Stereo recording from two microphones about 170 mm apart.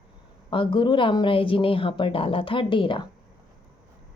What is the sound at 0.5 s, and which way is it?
A woman's voice, 30° left (ahead or behind).